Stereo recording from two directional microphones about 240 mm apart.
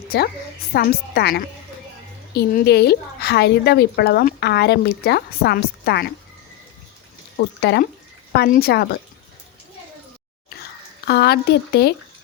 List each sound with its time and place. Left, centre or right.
0.7 s a woman's voice: left
7.6 s a woman's voice: left
11.0 s speech: left